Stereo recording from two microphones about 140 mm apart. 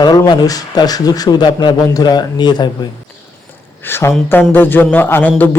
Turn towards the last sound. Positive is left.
turn(degrees=10)  # may be behind; listen again after turning